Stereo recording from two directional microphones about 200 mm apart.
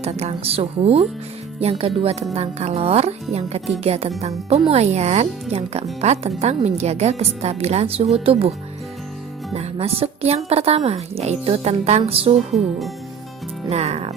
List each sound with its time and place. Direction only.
0.0 s speech: 30° right (ahead or behind)
13.7 s speech: 30° right (ahead or behind)